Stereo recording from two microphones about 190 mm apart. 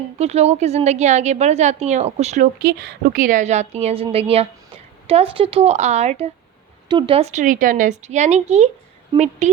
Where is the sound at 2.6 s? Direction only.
55° right (ahead or behind).